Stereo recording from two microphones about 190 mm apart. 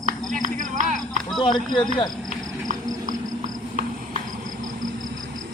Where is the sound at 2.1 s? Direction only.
Centre (ahead or behind).